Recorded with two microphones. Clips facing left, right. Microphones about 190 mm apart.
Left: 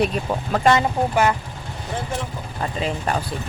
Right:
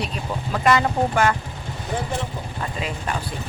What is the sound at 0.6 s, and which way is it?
Speech, 25° left (ahead or behind).